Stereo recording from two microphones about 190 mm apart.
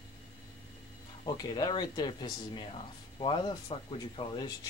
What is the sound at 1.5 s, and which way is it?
Speech, 20° left (ahead or behind).